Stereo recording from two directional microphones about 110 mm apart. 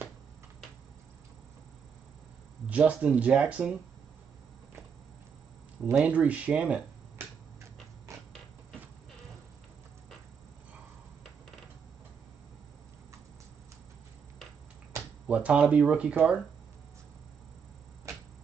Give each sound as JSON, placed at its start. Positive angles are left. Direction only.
{"t": 2.7, "sound": "speech", "side_deg": -10}
{"t": 6.0, "sound": "speech", "side_deg": -15}
{"t": 8.1, "sound": "a sound", "side_deg": -25}
{"t": 15.2, "sound": "speech", "side_deg": -10}